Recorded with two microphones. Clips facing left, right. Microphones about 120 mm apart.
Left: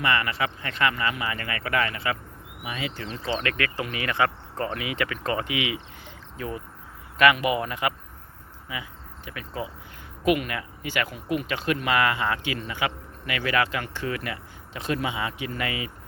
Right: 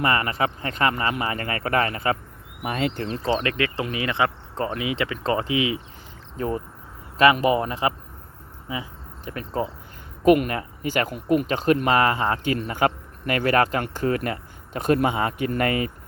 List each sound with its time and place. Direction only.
0.0 s speech: 40° right (ahead or behind)
2.6 s speech: 55° right (ahead or behind)
3.4 s speech: 25° right (ahead or behind); by 15.9 s 45° right (ahead or behind)